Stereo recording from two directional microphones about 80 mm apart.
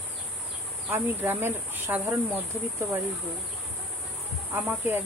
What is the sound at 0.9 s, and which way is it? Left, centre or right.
Speech, right.